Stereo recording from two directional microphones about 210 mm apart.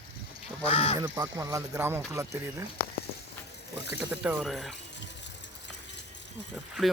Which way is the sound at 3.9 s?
5° right (ahead or behind).